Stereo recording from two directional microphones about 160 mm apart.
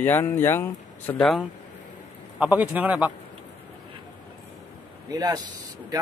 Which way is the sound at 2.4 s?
10° right (ahead or behind).